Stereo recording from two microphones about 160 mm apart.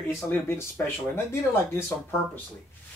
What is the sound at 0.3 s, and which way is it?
Speech, 15° left (ahead or behind).